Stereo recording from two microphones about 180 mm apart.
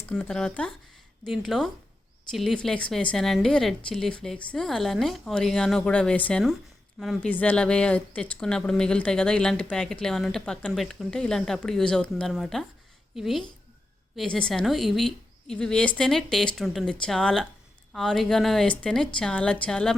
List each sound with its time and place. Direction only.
0.0 s a woman's voice: 10° left (ahead or behind)